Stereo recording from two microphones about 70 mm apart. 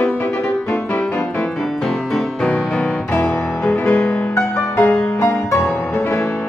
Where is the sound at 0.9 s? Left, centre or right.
Centre.